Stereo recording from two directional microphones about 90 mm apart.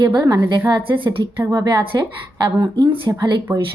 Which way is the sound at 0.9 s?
60° right (ahead or behind).